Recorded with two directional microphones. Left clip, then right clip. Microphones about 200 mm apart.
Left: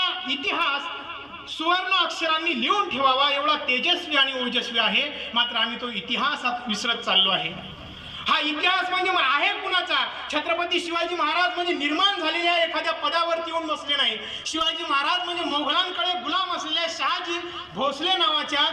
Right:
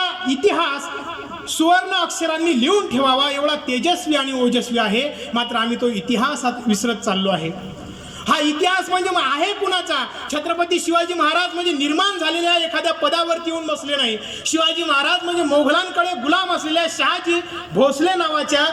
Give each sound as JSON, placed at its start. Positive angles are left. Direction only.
{"t": 0.0, "sound": "a woman's voice", "side_deg": -65}